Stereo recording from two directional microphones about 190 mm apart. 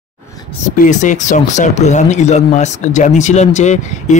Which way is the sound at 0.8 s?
40° left (ahead or behind).